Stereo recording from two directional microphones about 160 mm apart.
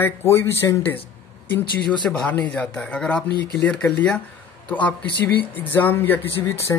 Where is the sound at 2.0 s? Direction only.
5° left (ahead or behind).